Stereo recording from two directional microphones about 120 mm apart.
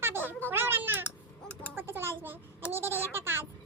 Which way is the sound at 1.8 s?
20° right (ahead or behind).